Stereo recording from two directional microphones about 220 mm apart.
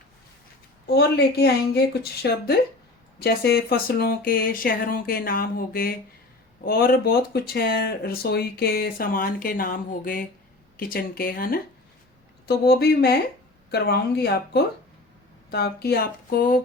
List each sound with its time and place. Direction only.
0.9 s speech: 50° left (ahead or behind)